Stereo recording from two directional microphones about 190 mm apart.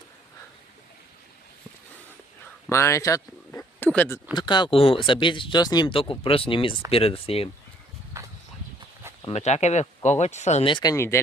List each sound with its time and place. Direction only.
2.6 s speech: 15° left (ahead or behind)
4.4 s speech: 25° left (ahead or behind)
8.1 s a sound: 15° right (ahead or behind)
9.3 s speech: 35° left (ahead or behind); by 11.2 s 15° left (ahead or behind)